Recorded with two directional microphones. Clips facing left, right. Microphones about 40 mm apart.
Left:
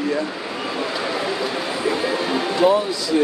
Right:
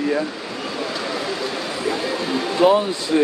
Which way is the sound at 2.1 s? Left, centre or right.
Centre.